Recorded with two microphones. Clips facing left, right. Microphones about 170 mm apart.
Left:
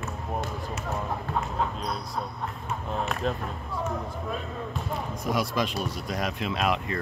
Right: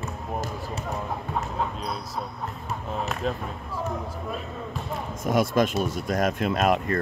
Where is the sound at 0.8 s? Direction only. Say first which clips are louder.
Left 1 dB; centre (ahead or behind).